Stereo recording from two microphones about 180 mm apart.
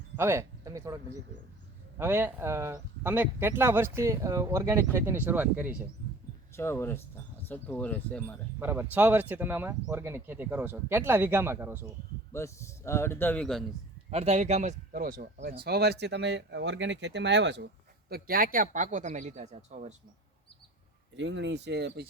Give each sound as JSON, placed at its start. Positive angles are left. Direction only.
{"t": 0.2, "sound": "speech", "side_deg": -15}
{"t": 2.0, "sound": "speech", "side_deg": -10}
{"t": 6.6, "sound": "a man's voice", "side_deg": 15}
{"t": 8.5, "sound": "speech", "side_deg": -10}
{"t": 12.3, "sound": "a man's voice", "side_deg": 15}
{"t": 14.1, "sound": "speech", "side_deg": -35}
{"t": 18.1, "sound": "speech", "side_deg": -55}
{"t": 21.2, "sound": "speech", "side_deg": -85}